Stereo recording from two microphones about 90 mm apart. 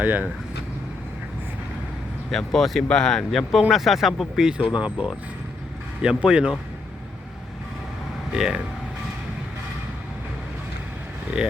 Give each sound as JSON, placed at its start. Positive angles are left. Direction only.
{"t": 0.0, "sound": "speech", "side_deg": -20}
{"t": 2.3, "sound": "speech", "side_deg": 5}
{"t": 8.3, "sound": "speech", "side_deg": -5}
{"t": 11.3, "sound": "speech", "side_deg": -10}